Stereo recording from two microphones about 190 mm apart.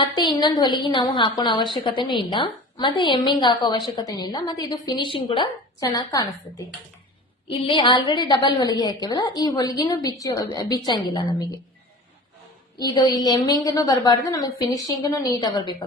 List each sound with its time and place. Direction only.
0.1 s a woman's voice: 20° left (ahead or behind)
12.8 s a woman's voice: 20° left (ahead or behind)